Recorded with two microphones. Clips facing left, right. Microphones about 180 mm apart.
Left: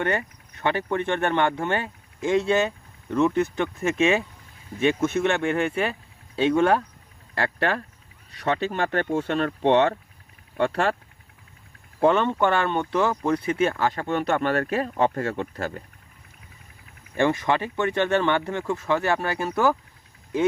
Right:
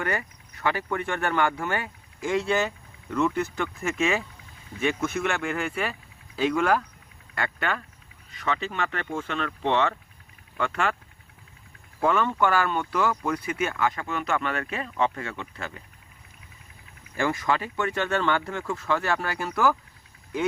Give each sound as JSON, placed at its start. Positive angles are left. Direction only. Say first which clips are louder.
{"t": 0.0, "sound": "speech", "louder": "left 4 dB", "side_deg": 25}
{"t": 11.9, "sound": "speech", "louder": "left 4 dB", "side_deg": 25}
{"t": 17.2, "sound": "speech", "louder": "left 4 dB", "side_deg": 25}